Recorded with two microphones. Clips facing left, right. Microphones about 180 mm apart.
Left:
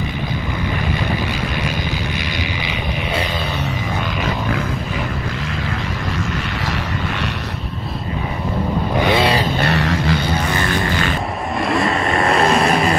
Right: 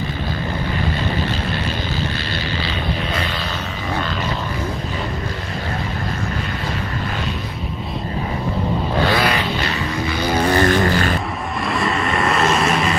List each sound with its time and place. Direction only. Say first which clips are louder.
9.0 s vehicle: left 3 dB; 25° left (ahead or behind)
9.6 s music: left 4 dB; 70° left (ahead or behind)
10.6 s vehicle: right 4 dB; 45° right (ahead or behind)
11.6 s vehicle: left 3 dB; centre (ahead or behind)